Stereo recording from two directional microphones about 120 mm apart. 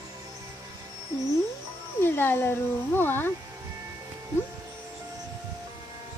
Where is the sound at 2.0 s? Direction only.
20° left (ahead or behind).